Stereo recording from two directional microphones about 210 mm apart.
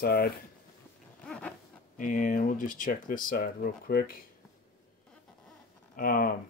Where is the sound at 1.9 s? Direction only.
40° left (ahead or behind).